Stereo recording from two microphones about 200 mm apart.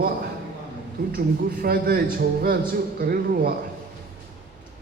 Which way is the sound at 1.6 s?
50° right (ahead or behind).